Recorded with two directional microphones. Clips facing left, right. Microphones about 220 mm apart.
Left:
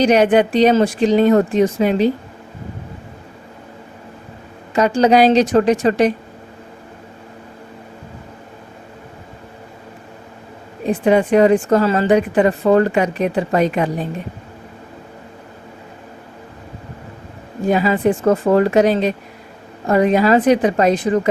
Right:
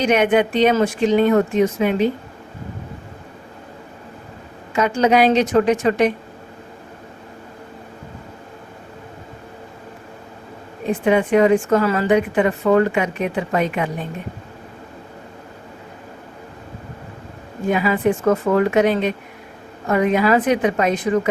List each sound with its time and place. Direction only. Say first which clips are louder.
0.0 s a woman's voice: left 3 dB; 35° left (ahead or behind)
4.7 s a woman's voice: left 3 dB; 35° left (ahead or behind)
10.8 s a woman's voice: left 3 dB; 35° left (ahead or behind)
17.7 s a woman's voice: left 2 dB; 35° left (ahead or behind)